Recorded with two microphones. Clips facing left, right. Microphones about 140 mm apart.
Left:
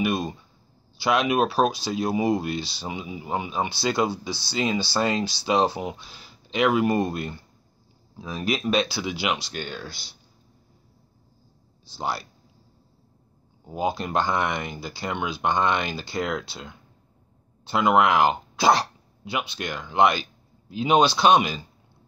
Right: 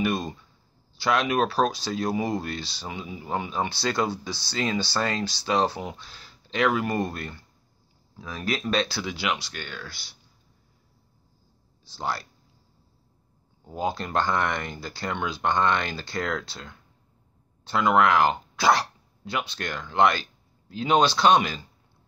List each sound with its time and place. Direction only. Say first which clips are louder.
0.0 s a sound: left 1 dB; 10° left (ahead or behind)
0.9 s speech: left 2 dB; 10° left (ahead or behind)
11.9 s speech: left 1 dB; 10° left (ahead or behind)
13.7 s speech: left 2 dB; 10° left (ahead or behind)
19.2 s speech: left 1 dB; 10° left (ahead or behind)